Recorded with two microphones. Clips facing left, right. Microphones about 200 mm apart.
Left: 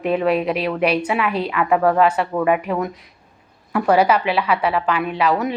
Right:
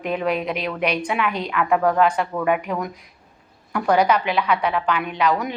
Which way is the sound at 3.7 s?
5° left (ahead or behind).